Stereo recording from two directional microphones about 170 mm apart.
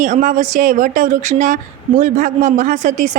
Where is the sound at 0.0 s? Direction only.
50° right (ahead or behind).